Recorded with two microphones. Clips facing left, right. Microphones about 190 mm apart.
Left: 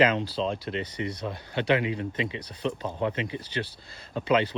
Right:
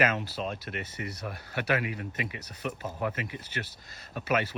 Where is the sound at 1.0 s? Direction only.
25° left (ahead or behind).